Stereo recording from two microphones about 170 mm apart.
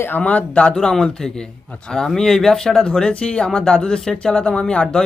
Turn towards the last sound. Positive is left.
turn(degrees=5)  # may be behind; listen again after turning